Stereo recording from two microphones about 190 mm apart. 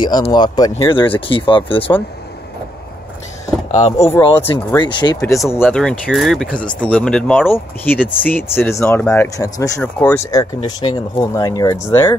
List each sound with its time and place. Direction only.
0.0 s speech: 20° left (ahead or behind)
4.0 s speech: 15° left (ahead or behind)
4.7 s speech: 20° left (ahead or behind)
5.5 s speech: 10° left (ahead or behind)